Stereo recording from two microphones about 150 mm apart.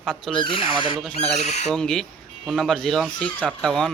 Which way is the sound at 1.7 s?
5° left (ahead or behind).